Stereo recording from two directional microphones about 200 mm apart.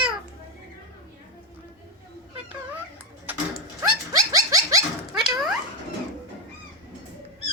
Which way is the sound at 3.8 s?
15° right (ahead or behind).